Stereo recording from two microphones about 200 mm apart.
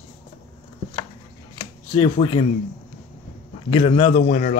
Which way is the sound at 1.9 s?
25° left (ahead or behind).